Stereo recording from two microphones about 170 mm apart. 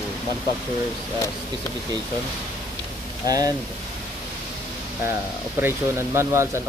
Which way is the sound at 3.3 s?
20° right (ahead or behind).